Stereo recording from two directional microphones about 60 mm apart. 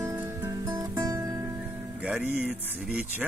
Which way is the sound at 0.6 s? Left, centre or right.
Right.